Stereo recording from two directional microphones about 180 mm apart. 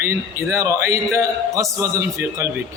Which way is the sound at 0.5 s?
15° right (ahead or behind).